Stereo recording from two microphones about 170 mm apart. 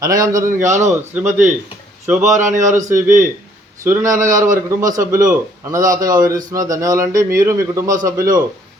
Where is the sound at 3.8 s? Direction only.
15° right (ahead or behind).